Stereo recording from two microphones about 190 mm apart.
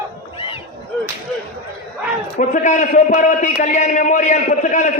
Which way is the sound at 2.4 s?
40° left (ahead or behind).